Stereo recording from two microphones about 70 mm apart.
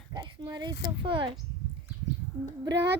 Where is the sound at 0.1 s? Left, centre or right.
Right.